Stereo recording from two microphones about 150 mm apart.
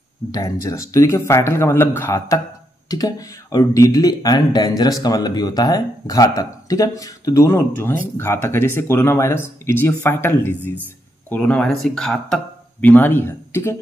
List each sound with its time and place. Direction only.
0.3 s speech: 20° left (ahead or behind)